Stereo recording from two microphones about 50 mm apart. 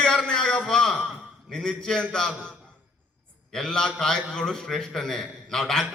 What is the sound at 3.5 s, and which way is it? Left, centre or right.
A man's voice, centre.